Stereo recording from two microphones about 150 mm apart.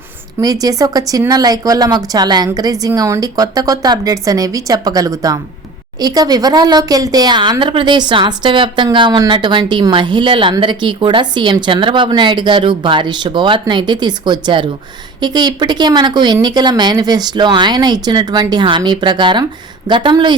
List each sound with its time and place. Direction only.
0.3 s a woman's voice: 25° right (ahead or behind)